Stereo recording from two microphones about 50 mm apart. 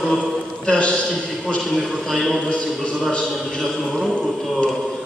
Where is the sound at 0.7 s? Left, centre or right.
Left.